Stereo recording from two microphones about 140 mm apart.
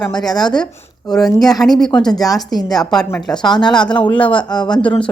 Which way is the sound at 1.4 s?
Centre (ahead or behind).